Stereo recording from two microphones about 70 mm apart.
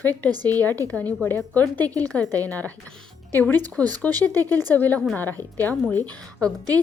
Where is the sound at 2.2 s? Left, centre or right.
Right.